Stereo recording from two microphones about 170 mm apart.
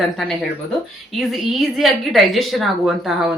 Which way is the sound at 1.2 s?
Centre (ahead or behind).